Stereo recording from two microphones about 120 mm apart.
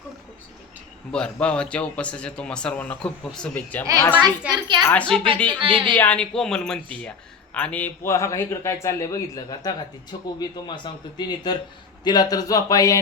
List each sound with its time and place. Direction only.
1.1 s a man's voice: 10° left (ahead or behind)
4.2 s a child's voice: 35° right (ahead or behind)
4.9 s a man's voice: 10° left (ahead or behind)
5.5 s speech: 45° right (ahead or behind)
6.0 s a man's voice: 10° left (ahead or behind); by 13.0 s 30° left (ahead or behind)